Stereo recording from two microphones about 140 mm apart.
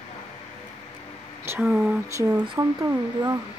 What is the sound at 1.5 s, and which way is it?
Speech, 20° right (ahead or behind).